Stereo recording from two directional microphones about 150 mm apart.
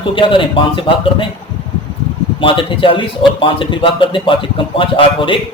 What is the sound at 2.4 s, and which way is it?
A man's voice, 35° left (ahead or behind).